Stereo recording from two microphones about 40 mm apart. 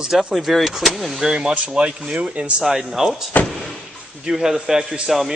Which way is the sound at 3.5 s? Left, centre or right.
Centre.